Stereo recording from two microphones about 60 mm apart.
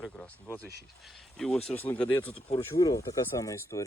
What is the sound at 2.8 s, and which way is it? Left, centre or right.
Speech, left.